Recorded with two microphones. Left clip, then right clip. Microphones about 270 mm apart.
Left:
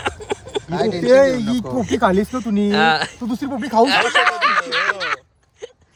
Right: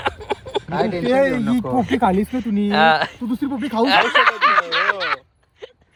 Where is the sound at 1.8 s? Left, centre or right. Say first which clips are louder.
Left 3 dB; centre.